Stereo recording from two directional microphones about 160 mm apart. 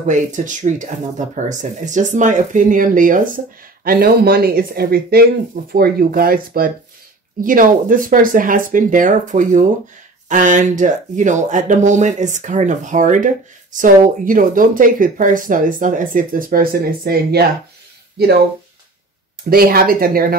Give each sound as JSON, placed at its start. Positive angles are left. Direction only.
{"t": 0.0, "sound": "speech", "side_deg": -50}
{"t": 3.8, "sound": "speech", "side_deg": -70}
{"t": 19.5, "sound": "speech", "side_deg": -70}